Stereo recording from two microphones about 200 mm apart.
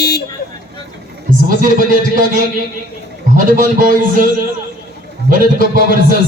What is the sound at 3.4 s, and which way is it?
Music, 45° right (ahead or behind).